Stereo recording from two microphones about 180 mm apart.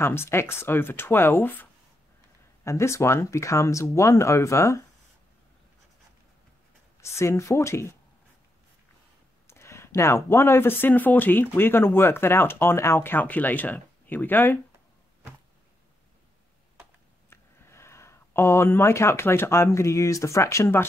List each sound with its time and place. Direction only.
0.0 s speech: 15° left (ahead or behind)
7.0 s speech: 15° left (ahead or behind)
9.5 s speech: 15° left (ahead or behind)
17.3 s speech: 15° left (ahead or behind)